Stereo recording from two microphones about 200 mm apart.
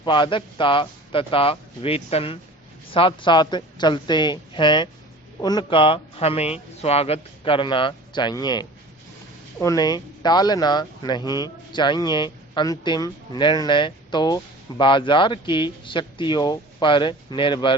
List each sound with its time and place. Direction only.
0.0 s speech: 25° left (ahead or behind)